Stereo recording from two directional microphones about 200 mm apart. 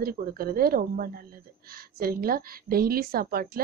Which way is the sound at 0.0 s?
50° right (ahead or behind).